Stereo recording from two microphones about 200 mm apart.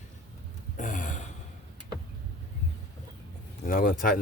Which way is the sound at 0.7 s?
40° left (ahead or behind).